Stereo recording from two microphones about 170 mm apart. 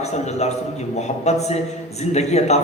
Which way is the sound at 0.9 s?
40° left (ahead or behind).